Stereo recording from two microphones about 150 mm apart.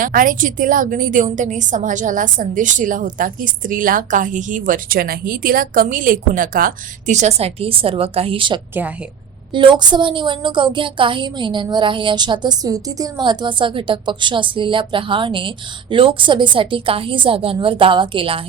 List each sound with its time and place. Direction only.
0.0 s a woman's voice: 65° right (ahead or behind); by 18.3 s 35° right (ahead or behind)